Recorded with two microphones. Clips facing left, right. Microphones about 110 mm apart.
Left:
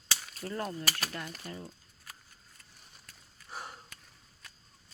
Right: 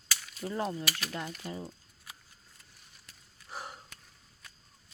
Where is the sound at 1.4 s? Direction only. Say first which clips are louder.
Right 3 dB; 15° right (ahead or behind).